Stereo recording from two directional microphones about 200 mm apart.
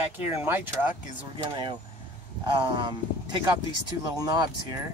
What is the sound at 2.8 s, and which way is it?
Speech, 20° right (ahead or behind).